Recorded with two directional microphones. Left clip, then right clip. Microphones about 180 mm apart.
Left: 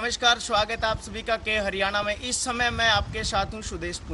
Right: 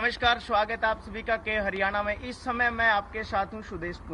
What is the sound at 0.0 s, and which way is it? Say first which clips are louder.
Speech: left 2 dB; 20° left (ahead or behind).